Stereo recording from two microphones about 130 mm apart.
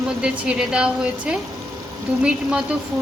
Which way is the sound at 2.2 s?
5° right (ahead or behind).